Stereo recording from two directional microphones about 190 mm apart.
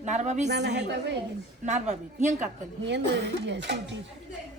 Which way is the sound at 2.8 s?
65° right (ahead or behind).